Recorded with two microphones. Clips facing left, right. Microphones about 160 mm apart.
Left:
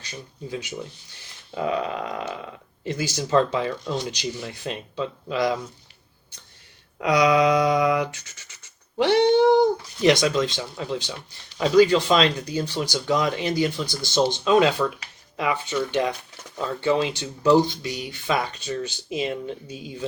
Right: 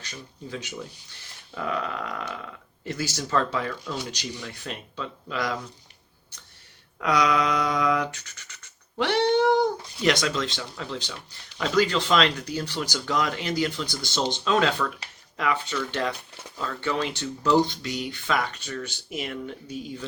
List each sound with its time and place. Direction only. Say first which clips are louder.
1.5 s speech: left 4 dB; 25° left (ahead or behind)
7.0 s speech: left 5 dB; 20° left (ahead or behind)